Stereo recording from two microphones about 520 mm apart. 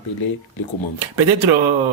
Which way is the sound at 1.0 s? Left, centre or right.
Right.